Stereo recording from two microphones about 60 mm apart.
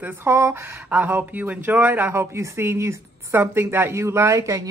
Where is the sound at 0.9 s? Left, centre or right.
Right.